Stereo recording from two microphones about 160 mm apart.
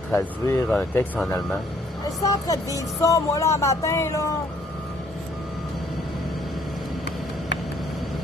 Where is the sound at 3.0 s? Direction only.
20° left (ahead or behind).